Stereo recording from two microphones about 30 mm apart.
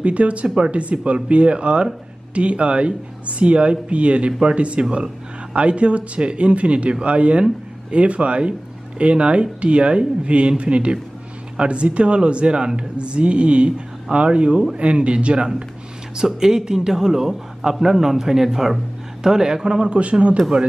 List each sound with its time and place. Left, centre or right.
0.0 s speech: right
16.2 s a man's voice: right
19.9 s speech: right